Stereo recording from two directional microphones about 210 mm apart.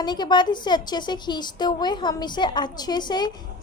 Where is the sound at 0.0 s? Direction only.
20° left (ahead or behind).